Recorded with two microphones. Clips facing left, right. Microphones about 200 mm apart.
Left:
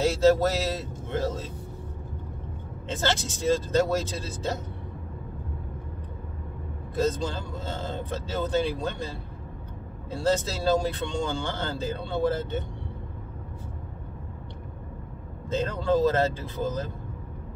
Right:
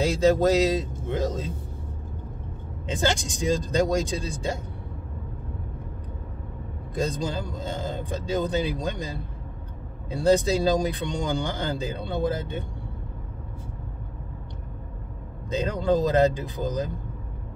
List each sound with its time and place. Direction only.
0.0 s speech: 15° right (ahead or behind)
2.9 s speech: 15° right (ahead or behind)
7.0 s speech: 15° right (ahead or behind)
15.5 s speech: 15° right (ahead or behind)